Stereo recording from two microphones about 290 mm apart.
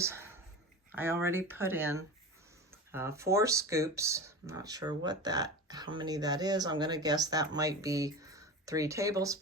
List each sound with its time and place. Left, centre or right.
0.0 s speech: centre